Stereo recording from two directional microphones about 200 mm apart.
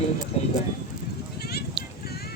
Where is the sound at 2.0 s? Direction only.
50° left (ahead or behind).